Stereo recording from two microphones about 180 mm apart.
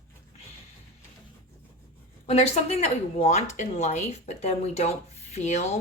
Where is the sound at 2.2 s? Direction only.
35° left (ahead or behind).